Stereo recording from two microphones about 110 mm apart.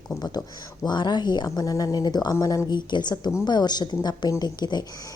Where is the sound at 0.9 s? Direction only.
40° left (ahead or behind).